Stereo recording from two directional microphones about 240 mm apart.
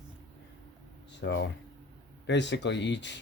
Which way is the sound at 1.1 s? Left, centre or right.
Left.